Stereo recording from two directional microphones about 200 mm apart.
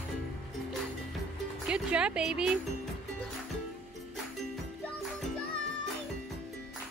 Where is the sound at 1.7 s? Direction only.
5° right (ahead or behind).